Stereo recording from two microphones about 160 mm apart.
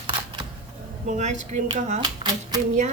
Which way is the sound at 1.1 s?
45° right (ahead or behind).